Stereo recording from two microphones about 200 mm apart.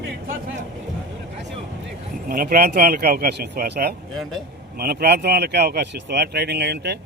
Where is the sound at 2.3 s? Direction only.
45° right (ahead or behind).